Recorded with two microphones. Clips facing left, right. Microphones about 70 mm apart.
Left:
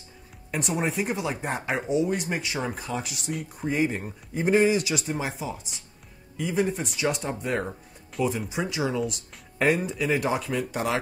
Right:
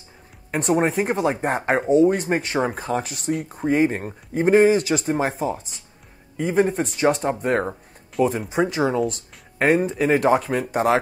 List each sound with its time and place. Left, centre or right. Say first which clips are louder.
0.5 s speech: right 8 dB; right